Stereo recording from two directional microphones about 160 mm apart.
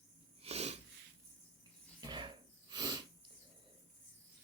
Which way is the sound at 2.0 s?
30° right (ahead or behind).